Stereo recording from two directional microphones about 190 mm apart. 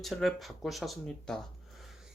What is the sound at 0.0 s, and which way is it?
Speech, centre (ahead or behind).